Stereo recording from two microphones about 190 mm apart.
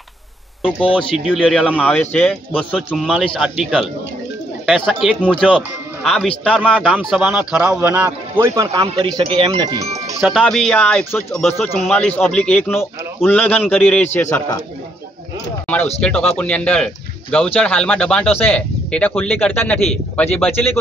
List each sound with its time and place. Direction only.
1.1 s speech: 5° right (ahead or behind)
8.8 s speech: 30° right (ahead or behind)
10.2 s a man's voice: centre (ahead or behind)
16.0 s a man's voice: 5° left (ahead or behind)